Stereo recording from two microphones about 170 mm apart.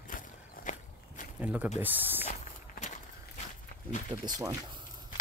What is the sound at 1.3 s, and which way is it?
Speech, 10° right (ahead or behind).